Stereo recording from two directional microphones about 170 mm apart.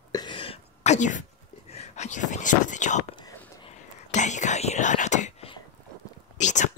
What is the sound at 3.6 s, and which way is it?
Whispering, 40° left (ahead or behind).